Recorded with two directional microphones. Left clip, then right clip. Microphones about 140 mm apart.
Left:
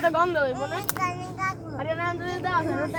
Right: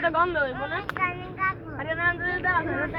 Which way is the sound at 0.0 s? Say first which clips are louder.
Left 1 dB; 20° left (ahead or behind).